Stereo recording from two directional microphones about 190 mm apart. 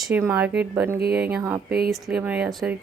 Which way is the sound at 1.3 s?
10° right (ahead or behind).